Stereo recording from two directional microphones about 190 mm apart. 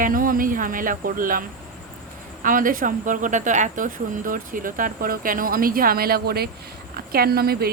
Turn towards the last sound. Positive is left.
turn(degrees=-55)  # may be behind; listen again after turning